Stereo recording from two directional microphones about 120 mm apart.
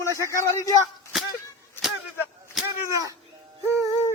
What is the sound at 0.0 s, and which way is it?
Speech, 25° left (ahead or behind).